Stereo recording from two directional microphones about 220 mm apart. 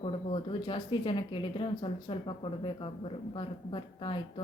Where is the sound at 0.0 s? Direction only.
25° left (ahead or behind).